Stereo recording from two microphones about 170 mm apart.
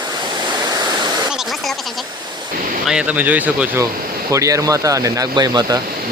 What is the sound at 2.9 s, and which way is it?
Speech, 5° right (ahead or behind).